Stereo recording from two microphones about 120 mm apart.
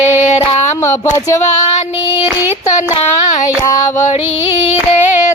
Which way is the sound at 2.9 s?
65° left (ahead or behind).